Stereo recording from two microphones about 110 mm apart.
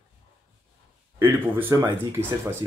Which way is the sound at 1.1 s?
20° right (ahead or behind).